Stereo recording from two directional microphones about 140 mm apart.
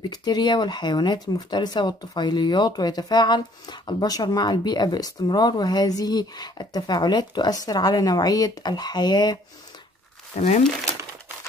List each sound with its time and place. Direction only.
0.1 s speech: 30° left (ahead or behind)